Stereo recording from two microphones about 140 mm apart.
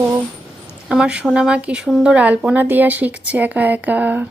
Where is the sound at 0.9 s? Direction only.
5° right (ahead or behind).